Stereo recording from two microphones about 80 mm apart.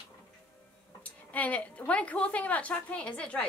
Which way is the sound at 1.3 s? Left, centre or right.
Centre.